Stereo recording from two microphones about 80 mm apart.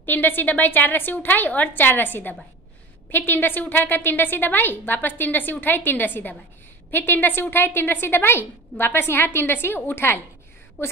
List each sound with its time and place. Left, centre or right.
0.0 s a woman's voice: left